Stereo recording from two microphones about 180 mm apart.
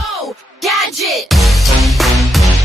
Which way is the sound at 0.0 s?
Centre (ahead or behind).